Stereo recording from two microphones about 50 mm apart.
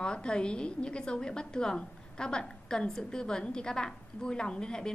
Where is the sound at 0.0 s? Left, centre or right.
Centre.